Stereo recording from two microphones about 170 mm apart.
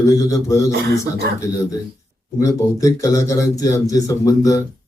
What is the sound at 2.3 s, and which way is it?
Speech, 20° left (ahead or behind).